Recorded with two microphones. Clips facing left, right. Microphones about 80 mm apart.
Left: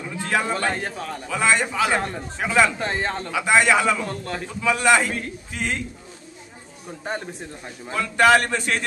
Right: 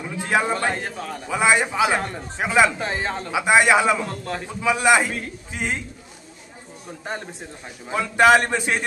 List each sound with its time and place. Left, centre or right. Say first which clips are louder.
0.0 s a sound: right 2 dB; centre
0.5 s a man's voice: right 1 dB; centre
1.3 s a man's voice: right 2 dB; centre
2.0 s a man's voice: left 1 dB; centre
2.3 s speech: right 1 dB; centre
2.8 s a man's voice: left 1 dB; centre
3.3 s a man's voice: right 2 dB; centre
4.0 s a man's voice: even; centre
4.5 s a man's voice: right 1 dB; centre
6.9 s a man's voice: left 2 dB; centre
8.0 s a man's voice: right 1 dB; centre